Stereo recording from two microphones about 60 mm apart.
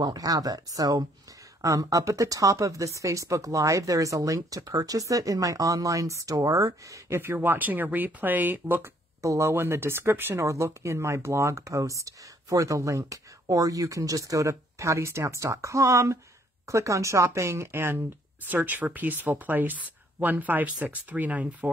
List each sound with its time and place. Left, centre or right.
0.2 s speech: right
1.6 s speech: right
7.1 s speech: right
7.3 s speech: right
9.2 s speech: right
9.5 s speech: right
10.4 s speech: right